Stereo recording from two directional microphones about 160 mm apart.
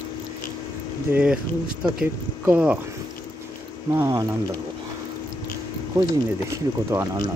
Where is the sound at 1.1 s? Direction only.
5° right (ahead or behind).